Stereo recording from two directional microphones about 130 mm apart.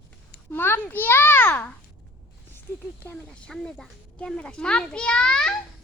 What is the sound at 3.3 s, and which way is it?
A child's voice, 5° left (ahead or behind).